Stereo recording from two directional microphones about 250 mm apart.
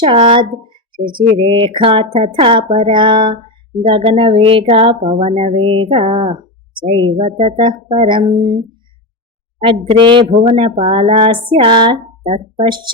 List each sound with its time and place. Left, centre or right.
0.0 s speech: centre